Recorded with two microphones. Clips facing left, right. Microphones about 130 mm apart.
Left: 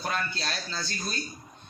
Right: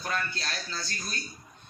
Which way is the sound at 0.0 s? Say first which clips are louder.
Left 2 dB; 25° left (ahead or behind).